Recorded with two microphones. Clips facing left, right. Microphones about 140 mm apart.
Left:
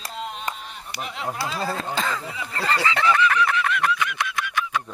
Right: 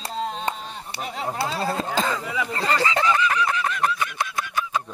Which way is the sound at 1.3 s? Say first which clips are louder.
Right 3 dB; 30° right (ahead or behind).